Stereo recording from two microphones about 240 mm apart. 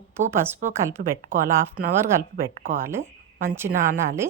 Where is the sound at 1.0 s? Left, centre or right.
Right.